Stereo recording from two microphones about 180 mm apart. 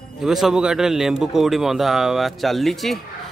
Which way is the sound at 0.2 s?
Centre (ahead or behind).